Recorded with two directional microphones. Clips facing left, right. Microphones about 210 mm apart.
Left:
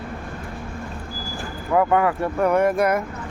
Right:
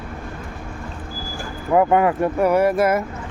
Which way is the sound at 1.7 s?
20° right (ahead or behind).